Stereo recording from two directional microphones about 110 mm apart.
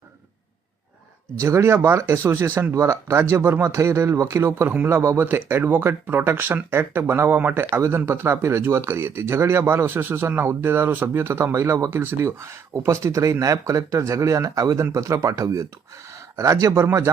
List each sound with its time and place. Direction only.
1.4 s speech: 25° right (ahead or behind)